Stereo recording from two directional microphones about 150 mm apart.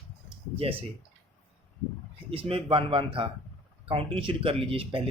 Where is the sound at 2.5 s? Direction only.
35° right (ahead or behind).